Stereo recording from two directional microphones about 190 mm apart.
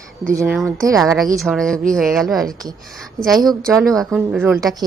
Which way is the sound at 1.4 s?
Centre (ahead or behind).